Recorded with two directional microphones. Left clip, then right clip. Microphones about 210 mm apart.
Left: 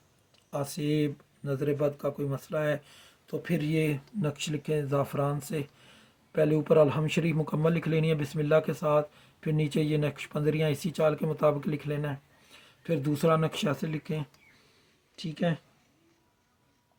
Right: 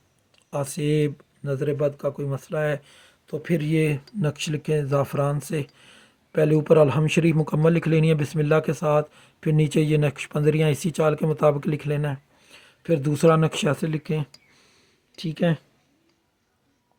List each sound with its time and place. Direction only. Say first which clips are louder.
0.5 s speech: right 6 dB; 50° right (ahead or behind)